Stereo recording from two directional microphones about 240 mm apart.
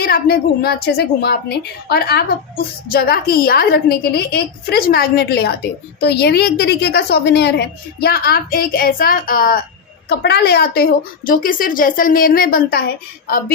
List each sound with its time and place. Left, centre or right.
0.0 s a woman's voice: left